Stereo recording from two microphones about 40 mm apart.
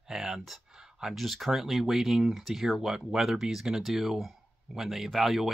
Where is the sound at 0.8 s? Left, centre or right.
Centre.